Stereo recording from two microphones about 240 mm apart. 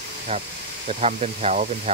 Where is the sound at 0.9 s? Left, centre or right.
Right.